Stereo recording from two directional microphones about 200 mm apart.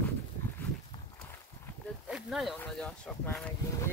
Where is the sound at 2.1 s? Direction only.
Centre (ahead or behind).